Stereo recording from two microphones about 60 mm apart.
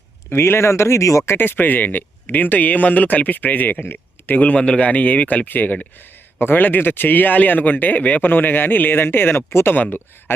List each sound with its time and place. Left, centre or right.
0.3 s speech: left
1.3 s speech: left
9.7 s speech: left